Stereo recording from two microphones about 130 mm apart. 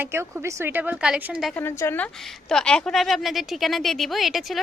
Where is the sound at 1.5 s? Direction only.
20° left (ahead or behind).